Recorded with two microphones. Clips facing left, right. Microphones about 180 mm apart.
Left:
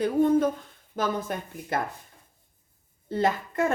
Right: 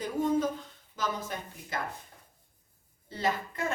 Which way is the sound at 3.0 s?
50° left (ahead or behind).